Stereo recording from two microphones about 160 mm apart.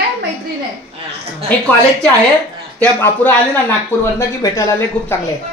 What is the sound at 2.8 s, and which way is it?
Speech, 10° left (ahead or behind).